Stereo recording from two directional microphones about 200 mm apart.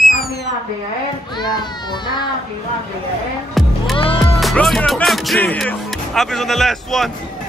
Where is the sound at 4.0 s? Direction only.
25° left (ahead or behind).